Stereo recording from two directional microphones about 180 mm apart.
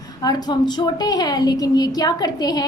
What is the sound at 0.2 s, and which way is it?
A woman's voice, 20° left (ahead or behind).